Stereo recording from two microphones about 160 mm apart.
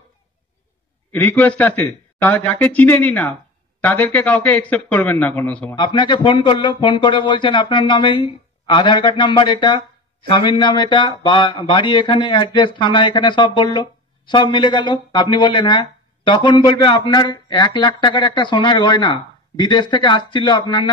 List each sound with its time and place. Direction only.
1.1 s a man's voice: 10° left (ahead or behind)
5.8 s speech: 30° left (ahead or behind)